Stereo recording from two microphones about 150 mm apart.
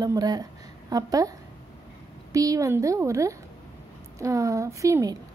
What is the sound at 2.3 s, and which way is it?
A woman's voice, 20° right (ahead or behind).